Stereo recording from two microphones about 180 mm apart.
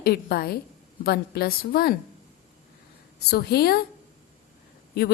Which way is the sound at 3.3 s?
60° left (ahead or behind).